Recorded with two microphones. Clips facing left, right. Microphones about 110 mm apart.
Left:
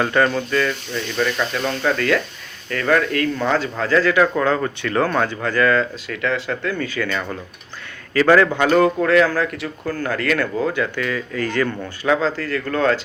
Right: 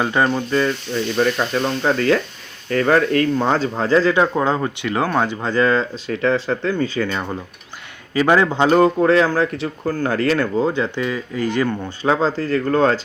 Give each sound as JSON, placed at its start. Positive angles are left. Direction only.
{"t": 0.0, "sound": "speech", "side_deg": -15}
{"t": 0.5, "sound": "speech", "side_deg": -30}
{"t": 12.0, "sound": "speech", "side_deg": -35}